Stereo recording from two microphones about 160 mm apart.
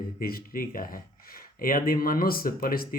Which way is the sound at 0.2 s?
70° left (ahead or behind).